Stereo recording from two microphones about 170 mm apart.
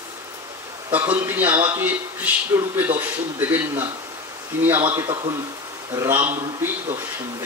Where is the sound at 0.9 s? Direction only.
10° right (ahead or behind).